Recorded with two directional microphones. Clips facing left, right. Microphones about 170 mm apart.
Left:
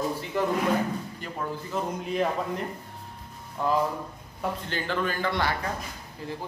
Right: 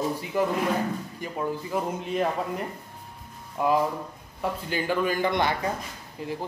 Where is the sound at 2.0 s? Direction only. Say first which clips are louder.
Even; centre (ahead or behind).